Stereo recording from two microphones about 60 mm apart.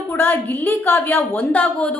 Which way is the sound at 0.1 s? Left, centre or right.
Left.